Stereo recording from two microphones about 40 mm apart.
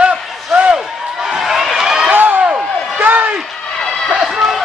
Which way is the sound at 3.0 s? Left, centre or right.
Right.